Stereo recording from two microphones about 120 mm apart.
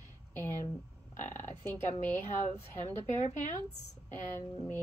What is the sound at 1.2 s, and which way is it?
Speech, 85° left.